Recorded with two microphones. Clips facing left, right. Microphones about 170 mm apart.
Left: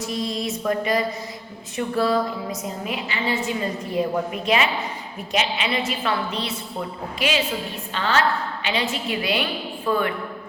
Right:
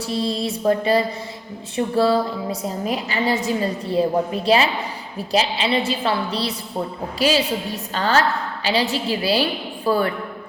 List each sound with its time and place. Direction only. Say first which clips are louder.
0.0 s a woman's voice: right 3 dB; 30° right (ahead or behind)